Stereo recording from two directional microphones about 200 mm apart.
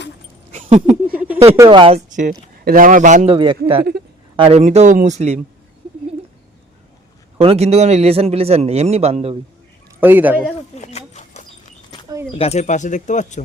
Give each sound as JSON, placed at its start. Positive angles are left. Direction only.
{"t": 0.5, "sound": "a sound", "side_deg": -35}
{"t": 1.1, "sound": "a sound", "side_deg": -10}
{"t": 1.5, "sound": "speech", "side_deg": -20}
{"t": 2.0, "sound": "a man's voice", "side_deg": -40}
{"t": 3.2, "sound": "a man's voice", "side_deg": -25}
{"t": 7.3, "sound": "a man's voice", "side_deg": -30}
{"t": 10.0, "sound": "speech", "side_deg": -10}
{"t": 10.8, "sound": "dog", "side_deg": 35}
{"t": 12.4, "sound": "speech", "side_deg": 35}